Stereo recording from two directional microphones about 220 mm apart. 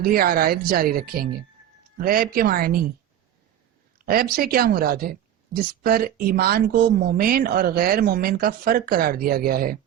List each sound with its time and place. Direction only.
0.0 s speech: 40° right (ahead or behind)
3.9 s speech: 40° right (ahead or behind)